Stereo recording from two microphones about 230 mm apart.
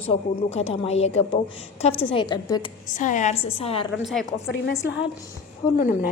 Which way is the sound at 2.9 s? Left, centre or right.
Left.